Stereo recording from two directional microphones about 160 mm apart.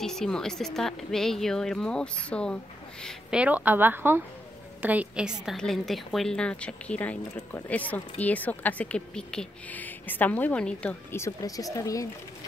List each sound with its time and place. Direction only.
0.0 s a woman's voice: 5° left (ahead or behind)
3.3 s a woman's voice: 10° right (ahead or behind); by 12.1 s 20° left (ahead or behind)